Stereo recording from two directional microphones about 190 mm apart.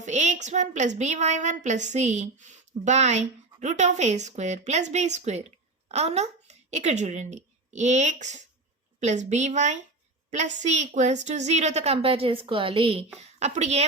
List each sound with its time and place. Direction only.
0.0 s a woman's voice: 40° right (ahead or behind)